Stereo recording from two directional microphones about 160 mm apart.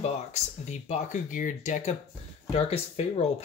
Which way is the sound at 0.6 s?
45° left (ahead or behind).